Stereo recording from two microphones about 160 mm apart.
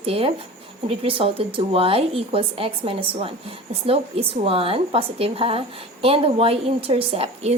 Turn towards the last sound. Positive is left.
turn(degrees=-35)  # may be behind; listen again after turning